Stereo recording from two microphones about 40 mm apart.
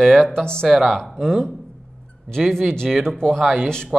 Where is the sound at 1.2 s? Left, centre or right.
Centre.